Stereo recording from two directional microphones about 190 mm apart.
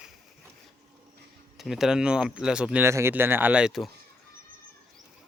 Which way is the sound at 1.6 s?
Centre (ahead or behind).